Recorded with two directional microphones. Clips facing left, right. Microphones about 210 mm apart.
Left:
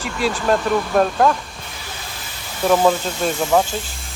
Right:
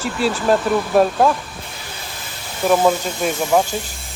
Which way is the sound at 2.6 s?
5° right (ahead or behind).